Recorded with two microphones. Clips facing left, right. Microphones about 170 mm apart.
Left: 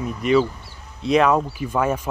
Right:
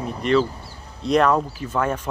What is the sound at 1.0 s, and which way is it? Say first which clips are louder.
Speech: left 1 dB; centre (ahead or behind).